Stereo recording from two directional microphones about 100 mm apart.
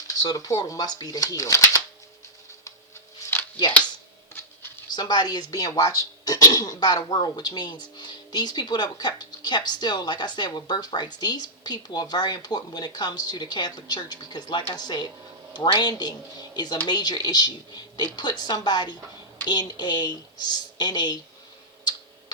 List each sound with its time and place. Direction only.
0.2 s speech: 40° left (ahead or behind)
3.3 s a sound: 20° left (ahead or behind)
4.9 s speech: 45° left (ahead or behind)